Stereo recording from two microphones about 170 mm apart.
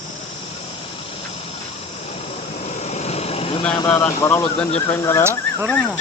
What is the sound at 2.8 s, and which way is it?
Vehicle, 40° left (ahead or behind).